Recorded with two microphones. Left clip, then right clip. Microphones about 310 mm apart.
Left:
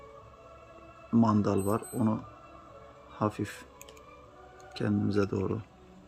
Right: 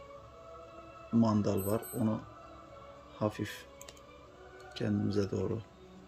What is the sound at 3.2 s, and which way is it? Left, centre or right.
Speech, centre.